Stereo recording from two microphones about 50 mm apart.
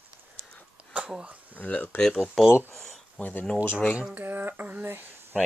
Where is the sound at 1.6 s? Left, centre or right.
Left.